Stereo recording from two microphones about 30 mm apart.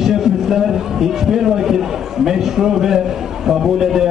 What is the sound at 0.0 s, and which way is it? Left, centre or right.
A man's voice, centre.